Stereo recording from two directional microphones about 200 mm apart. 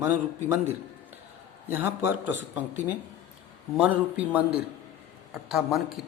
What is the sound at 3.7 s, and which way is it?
Speech, 5° right (ahead or behind).